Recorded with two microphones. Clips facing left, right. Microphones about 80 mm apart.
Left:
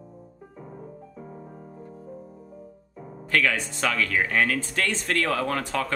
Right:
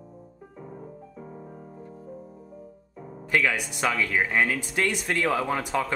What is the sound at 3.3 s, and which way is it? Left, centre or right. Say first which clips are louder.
Speech: left 1 dB; centre.